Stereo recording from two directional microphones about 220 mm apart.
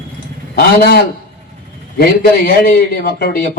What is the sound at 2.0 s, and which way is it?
A man's voice, 45° left (ahead or behind).